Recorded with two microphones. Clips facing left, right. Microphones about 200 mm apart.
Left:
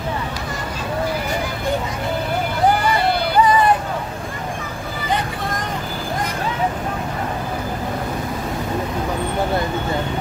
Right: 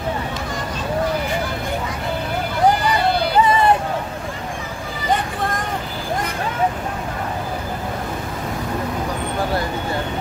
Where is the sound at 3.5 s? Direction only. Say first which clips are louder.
Left 1 dB; 25° right (ahead or behind).